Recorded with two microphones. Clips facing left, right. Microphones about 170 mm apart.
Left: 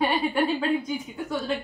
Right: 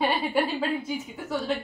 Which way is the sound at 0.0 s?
5° right (ahead or behind).